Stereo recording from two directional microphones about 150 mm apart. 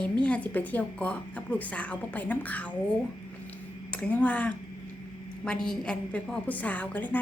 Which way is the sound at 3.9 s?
10° left (ahead or behind).